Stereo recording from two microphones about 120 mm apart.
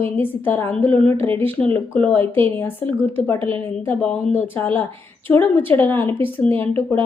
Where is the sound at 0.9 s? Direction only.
50° right (ahead or behind).